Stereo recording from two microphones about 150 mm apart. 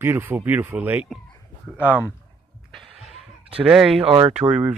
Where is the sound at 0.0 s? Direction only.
15° right (ahead or behind).